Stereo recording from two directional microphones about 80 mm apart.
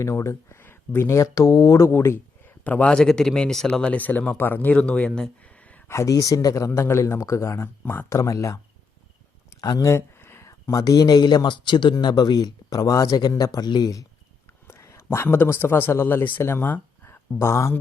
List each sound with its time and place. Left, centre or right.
0.0 s speech: left
2.0 s a sound: left
2.9 s speech: centre
5.9 s speech: left
8.1 s speech: left
9.6 s speech: left
9.9 s speech: left
14.7 s speech: left